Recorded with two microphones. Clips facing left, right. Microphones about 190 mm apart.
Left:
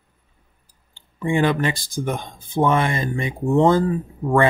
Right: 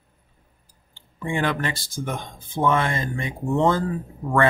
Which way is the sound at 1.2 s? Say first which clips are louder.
Left 5 dB; 15° left (ahead or behind).